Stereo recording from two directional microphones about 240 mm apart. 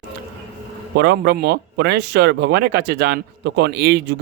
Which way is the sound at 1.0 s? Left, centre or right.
Right.